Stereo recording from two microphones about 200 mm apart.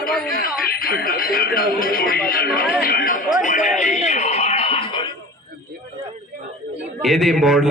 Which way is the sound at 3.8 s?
35° left (ahead or behind).